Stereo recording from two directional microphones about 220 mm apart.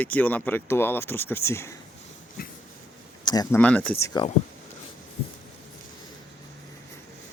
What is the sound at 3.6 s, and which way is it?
Speech, 5° left (ahead or behind).